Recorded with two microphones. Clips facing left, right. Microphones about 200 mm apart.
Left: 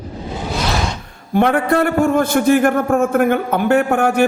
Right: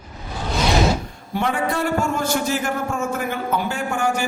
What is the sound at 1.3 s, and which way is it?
A man's voice, 60° left (ahead or behind).